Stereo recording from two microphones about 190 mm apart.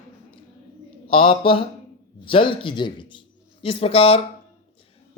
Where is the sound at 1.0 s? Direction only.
30° left (ahead or behind).